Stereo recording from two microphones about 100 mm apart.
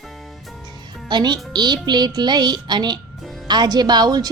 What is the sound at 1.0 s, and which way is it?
A child's voice, 45° right (ahead or behind).